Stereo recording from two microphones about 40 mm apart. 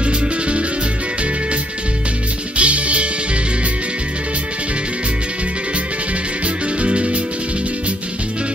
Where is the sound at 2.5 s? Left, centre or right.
Right.